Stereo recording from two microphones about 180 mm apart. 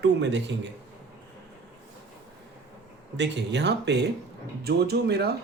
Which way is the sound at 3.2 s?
75° right (ahead or behind).